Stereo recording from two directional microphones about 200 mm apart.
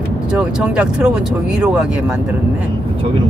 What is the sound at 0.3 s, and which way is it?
Speech, 5° right (ahead or behind).